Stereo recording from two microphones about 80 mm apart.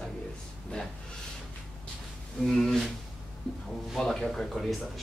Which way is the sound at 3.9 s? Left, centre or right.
Centre.